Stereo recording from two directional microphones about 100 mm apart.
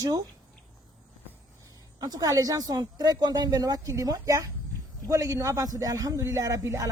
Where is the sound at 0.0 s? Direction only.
40° right (ahead or behind).